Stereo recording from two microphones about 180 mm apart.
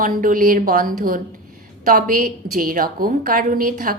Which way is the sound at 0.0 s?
50° right (ahead or behind).